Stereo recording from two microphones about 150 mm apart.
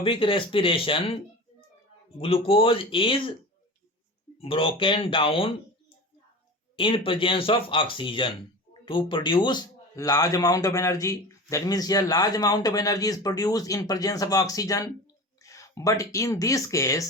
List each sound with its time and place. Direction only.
0.0 s speech: 35° left (ahead or behind)
2.2 s speech: 40° left (ahead or behind)
4.4 s speech: 40° left (ahead or behind)
6.7 s a man's voice: 35° left (ahead or behind); by 17.1 s 20° left (ahead or behind)